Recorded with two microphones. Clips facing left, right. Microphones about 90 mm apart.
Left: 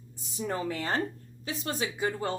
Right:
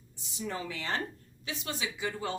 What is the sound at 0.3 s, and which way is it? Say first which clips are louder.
A woman's voice: left 5 dB; 45° left (ahead or behind).